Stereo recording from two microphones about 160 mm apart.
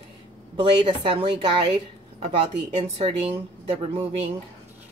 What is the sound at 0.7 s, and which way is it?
Speech, 30° right (ahead or behind).